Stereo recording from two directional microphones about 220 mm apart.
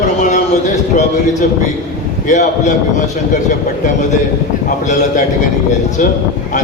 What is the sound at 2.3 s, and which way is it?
Speech, 35° left (ahead or behind).